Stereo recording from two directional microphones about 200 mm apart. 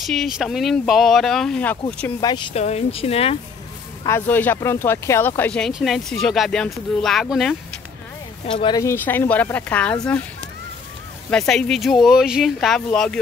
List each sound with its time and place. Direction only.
0.0 s speech: centre (ahead or behind)
2.1 s speech: 20° left (ahead or behind)
4.0 s speech: 10° left (ahead or behind)
8.5 s a woman's voice: 25° left (ahead or behind); by 9.9 s 5° left (ahead or behind)
11.2 s speech: 5° left (ahead or behind)